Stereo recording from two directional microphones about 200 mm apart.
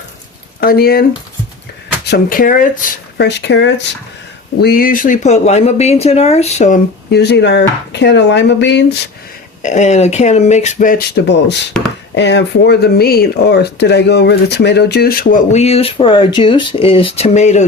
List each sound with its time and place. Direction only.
0.6 s speech: 50° left (ahead or behind)
2.0 s speech: 50° left (ahead or behind)
3.2 s speech: 60° left (ahead or behind)
4.6 s speech: 45° left (ahead or behind)
7.1 s speech: 60° left (ahead or behind)
9.6 s speech: 35° left (ahead or behind)